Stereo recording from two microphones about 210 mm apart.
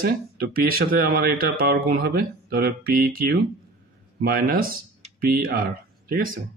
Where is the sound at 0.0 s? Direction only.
45° right (ahead or behind).